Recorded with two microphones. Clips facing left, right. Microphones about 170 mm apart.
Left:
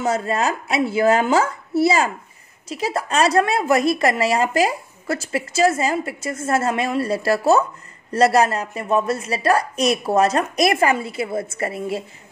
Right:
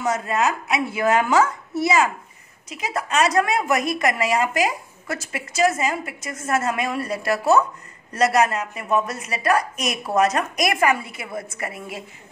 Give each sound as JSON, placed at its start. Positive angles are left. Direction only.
{"t": 0.0, "sound": "a woman's voice", "side_deg": 30}